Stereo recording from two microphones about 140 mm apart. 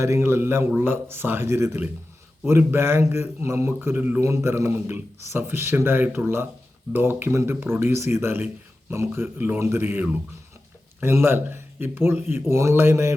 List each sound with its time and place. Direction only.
0.0 s a man's voice: 20° right (ahead or behind)